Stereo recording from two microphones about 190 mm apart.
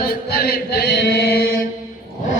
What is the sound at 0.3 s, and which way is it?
Chant, 55° left (ahead or behind).